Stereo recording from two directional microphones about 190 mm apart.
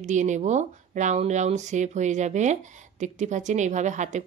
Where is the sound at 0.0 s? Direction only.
40° right (ahead or behind).